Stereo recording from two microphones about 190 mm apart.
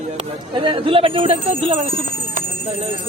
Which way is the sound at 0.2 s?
25° right (ahead or behind).